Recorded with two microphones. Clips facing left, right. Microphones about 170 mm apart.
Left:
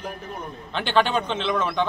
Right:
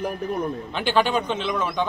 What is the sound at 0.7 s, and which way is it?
Speech, 10° right (ahead or behind).